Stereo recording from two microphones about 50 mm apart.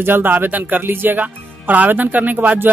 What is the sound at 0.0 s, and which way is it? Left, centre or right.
Speech, right.